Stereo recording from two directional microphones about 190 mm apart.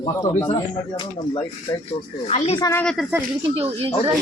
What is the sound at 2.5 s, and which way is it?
Speech, 20° left (ahead or behind).